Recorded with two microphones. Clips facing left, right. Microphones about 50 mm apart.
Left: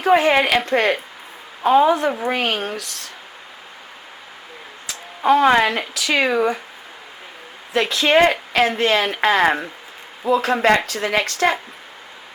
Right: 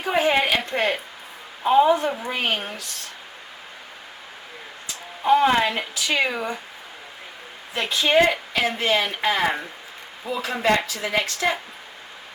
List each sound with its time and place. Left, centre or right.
0.0 s a woman's voice: left
4.9 s speech: left
7.7 s a woman's voice: left